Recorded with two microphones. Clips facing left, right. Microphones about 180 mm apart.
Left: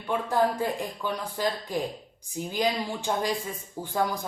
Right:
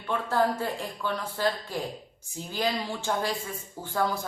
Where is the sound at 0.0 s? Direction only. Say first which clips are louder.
Left 1 dB; 15° left (ahead or behind).